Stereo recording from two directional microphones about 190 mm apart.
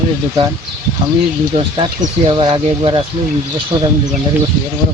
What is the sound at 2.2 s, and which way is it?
Speech, 30° right (ahead or behind).